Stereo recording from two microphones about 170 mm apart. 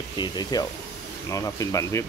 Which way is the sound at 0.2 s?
25° left (ahead or behind).